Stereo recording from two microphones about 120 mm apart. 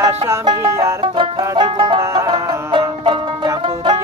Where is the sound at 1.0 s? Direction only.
40° right (ahead or behind).